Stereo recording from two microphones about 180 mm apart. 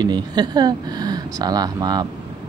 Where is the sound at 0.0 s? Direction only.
25° right (ahead or behind).